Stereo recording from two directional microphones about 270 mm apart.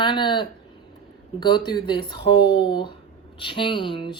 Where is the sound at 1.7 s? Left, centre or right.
Centre.